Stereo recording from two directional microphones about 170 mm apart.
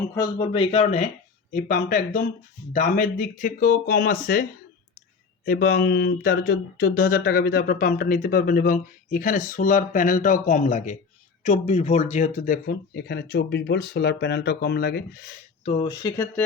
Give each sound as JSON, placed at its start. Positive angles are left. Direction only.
{"t": 0.1, "sound": "speech", "side_deg": 15}
{"t": 0.5, "sound": "speech", "side_deg": 35}
{"t": 1.5, "sound": "speech", "side_deg": 55}
{"t": 5.5, "sound": "speech", "side_deg": 60}
{"t": 15.6, "sound": "speech", "side_deg": 40}
{"t": 15.9, "sound": "speech", "side_deg": 25}